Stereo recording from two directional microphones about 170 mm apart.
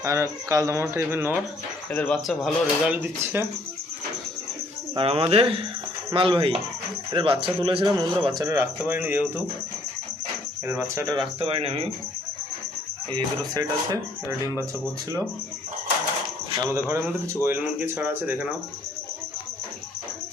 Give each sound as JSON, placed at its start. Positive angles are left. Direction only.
{"t": 0.0, "sound": "speech", "side_deg": -15}
{"t": 1.9, "sound": "speech", "side_deg": 5}
{"t": 4.9, "sound": "speech", "side_deg": -35}
{"t": 10.7, "sound": "speech", "side_deg": -15}
{"t": 13.1, "sound": "speech", "side_deg": -25}
{"t": 16.6, "sound": "speech", "side_deg": -15}